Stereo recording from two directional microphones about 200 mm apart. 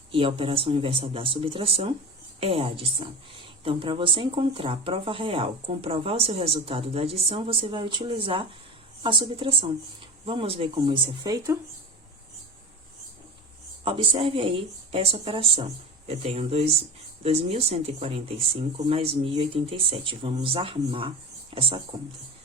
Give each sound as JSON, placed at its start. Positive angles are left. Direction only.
{"t": 0.1, "sound": "a woman's voice", "side_deg": -25}
{"t": 13.8, "sound": "a woman's voice", "side_deg": -25}